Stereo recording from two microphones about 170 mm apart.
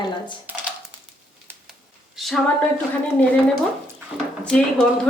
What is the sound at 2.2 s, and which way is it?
Speech, 5° left (ahead or behind).